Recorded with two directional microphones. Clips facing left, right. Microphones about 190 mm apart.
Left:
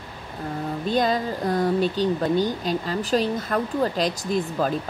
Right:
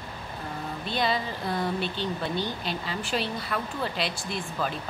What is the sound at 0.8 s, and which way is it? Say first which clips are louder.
Speech: left 6 dB; 45° left (ahead or behind).